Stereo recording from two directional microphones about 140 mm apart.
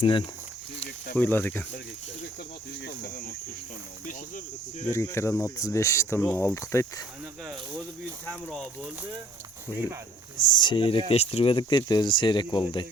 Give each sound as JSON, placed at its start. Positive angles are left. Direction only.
{"t": 0.0, "sound": "speech", "side_deg": 35}
{"t": 1.1, "sound": "speech", "side_deg": 15}
{"t": 4.9, "sound": "speech", "side_deg": 20}
{"t": 10.4, "sound": "speech", "side_deg": 35}
{"t": 11.1, "sound": "speech", "side_deg": 45}